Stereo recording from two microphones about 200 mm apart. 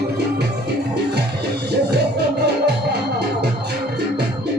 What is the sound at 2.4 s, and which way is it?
Music, 55° right (ahead or behind).